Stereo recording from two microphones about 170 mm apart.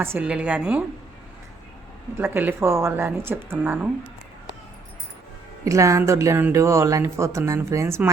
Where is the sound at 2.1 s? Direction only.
15° right (ahead or behind).